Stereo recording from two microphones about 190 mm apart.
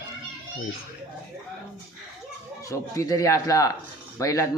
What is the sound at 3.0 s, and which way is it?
A man's voice, 15° left (ahead or behind).